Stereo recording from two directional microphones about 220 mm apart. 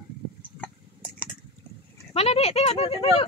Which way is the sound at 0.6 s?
5° left (ahead or behind).